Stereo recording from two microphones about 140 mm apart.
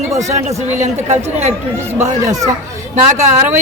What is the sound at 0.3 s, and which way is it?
Speech, 55° right (ahead or behind).